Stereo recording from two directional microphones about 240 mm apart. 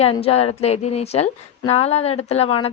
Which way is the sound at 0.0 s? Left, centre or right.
Left.